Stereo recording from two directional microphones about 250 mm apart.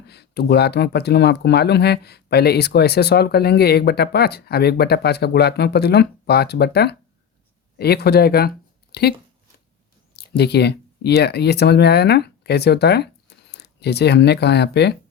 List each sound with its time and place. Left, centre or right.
0.1 s speech: left
10.2 s speech: left